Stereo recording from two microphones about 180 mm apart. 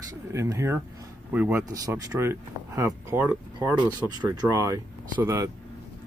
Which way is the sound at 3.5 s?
25° right (ahead or behind).